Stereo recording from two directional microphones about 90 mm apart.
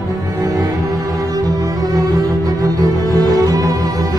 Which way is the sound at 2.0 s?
45° right (ahead or behind).